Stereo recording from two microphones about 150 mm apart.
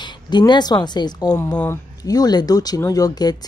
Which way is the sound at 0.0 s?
30° left (ahead or behind).